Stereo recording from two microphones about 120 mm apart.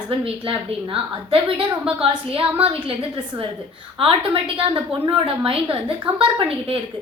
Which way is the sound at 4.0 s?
50° right (ahead or behind).